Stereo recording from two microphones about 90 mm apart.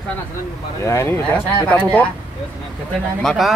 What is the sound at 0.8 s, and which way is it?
Speech, 30° left (ahead or behind).